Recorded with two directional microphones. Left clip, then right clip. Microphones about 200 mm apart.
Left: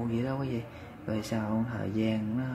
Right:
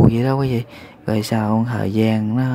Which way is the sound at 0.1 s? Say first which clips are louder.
Right 13 dB; 45° right (ahead or behind).